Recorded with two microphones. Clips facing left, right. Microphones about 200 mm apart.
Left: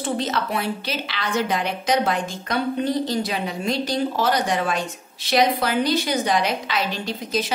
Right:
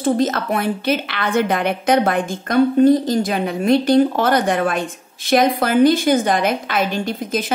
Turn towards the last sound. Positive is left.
turn(degrees=-50)  # may be behind; listen again after turning